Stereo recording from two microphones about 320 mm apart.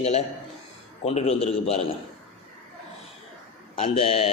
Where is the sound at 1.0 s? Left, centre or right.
Centre.